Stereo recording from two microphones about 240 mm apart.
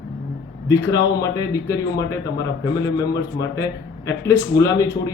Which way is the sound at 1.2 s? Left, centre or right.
Centre.